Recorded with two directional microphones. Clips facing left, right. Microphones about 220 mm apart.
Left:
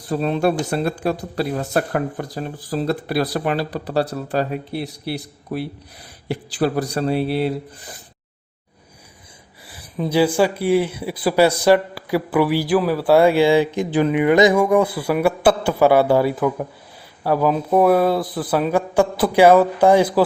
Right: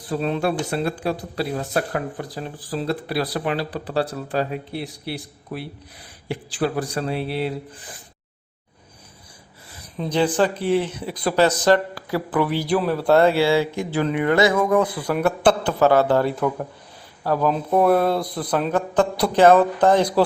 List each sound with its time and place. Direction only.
0.1 s speech: 40° left (ahead or behind)
6.2 s speech: 40° left (ahead or behind)
10.0 s speech: 5° left (ahead or behind)